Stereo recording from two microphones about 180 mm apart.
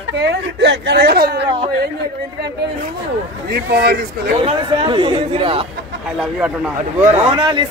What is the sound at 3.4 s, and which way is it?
Speech, 60° right (ahead or behind).